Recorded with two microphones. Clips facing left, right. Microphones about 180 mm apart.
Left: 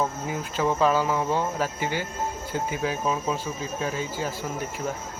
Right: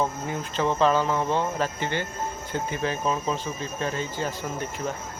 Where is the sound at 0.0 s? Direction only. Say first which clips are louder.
Even; 5° left (ahead or behind).